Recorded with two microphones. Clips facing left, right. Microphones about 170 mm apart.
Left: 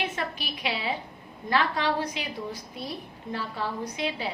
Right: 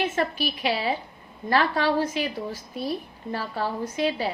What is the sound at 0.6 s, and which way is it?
A woman's voice, 45° right (ahead or behind).